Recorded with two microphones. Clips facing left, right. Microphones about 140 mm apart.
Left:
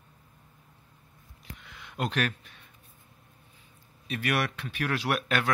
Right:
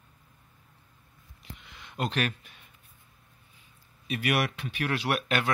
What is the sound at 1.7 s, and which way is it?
Speech, centre (ahead or behind).